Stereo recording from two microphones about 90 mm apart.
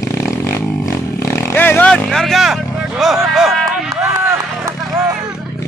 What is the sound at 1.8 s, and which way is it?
Speech, 10° left (ahead or behind).